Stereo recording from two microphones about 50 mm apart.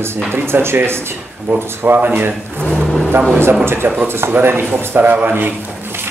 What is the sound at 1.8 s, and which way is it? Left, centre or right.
Speech, right.